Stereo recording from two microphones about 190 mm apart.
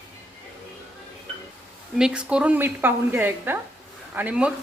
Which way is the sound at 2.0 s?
5° right (ahead or behind).